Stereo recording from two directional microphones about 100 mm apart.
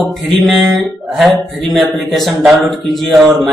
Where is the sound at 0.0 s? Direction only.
Centre (ahead or behind).